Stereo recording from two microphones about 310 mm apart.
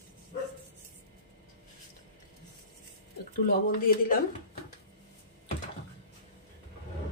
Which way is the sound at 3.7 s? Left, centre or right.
Left.